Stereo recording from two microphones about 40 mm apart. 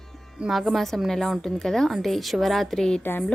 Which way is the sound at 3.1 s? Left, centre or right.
Left.